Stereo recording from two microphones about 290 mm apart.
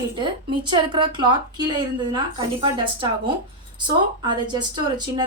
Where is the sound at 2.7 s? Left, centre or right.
Centre.